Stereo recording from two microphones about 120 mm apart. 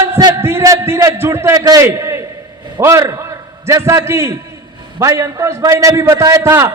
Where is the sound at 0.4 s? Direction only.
25° right (ahead or behind).